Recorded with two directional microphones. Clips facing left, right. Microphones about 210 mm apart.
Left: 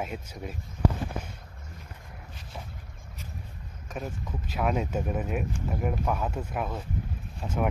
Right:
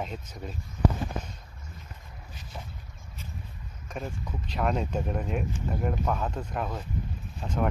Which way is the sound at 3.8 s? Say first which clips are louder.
Even; 5° left (ahead or behind).